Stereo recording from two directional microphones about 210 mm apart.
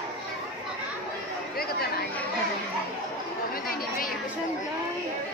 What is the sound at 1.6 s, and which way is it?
Chatter, 45° left (ahead or behind).